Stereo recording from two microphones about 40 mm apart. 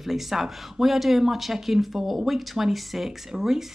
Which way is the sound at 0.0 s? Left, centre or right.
Centre.